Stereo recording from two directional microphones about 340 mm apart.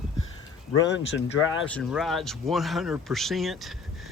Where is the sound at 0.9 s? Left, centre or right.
Left.